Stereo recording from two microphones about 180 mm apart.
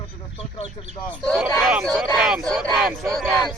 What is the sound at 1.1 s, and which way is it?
Speech, 5° left (ahead or behind).